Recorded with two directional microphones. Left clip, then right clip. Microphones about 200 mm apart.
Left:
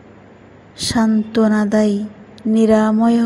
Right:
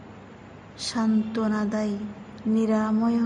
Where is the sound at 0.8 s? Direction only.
30° left (ahead or behind).